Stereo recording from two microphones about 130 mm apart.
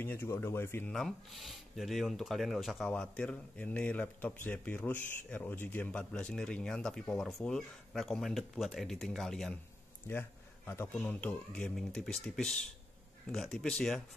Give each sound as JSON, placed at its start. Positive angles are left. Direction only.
{"t": 0.0, "sound": "speech", "side_deg": 15}
{"t": 0.9, "sound": "speech", "side_deg": 0}
{"t": 10.0, "sound": "speech", "side_deg": 15}